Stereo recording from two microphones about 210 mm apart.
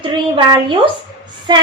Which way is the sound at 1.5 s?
20° right (ahead or behind).